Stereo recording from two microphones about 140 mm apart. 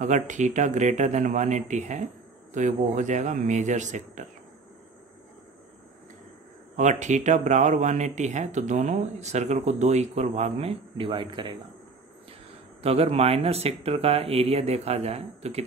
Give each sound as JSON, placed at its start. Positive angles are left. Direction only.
{"t": 0.0, "sound": "speech", "side_deg": -60}
{"t": 6.8, "sound": "speech", "side_deg": -60}
{"t": 12.8, "sound": "speech", "side_deg": -45}